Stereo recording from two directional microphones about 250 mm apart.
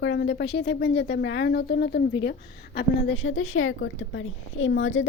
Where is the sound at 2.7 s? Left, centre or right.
Left.